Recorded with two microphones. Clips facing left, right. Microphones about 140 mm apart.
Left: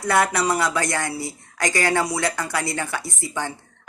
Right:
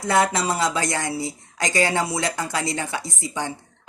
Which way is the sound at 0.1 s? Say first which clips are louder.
Even; 25° right (ahead or behind).